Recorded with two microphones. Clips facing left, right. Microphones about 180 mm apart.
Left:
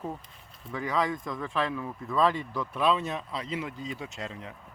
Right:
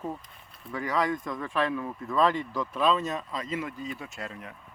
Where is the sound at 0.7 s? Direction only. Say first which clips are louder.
Right 1 dB; 15° left (ahead or behind).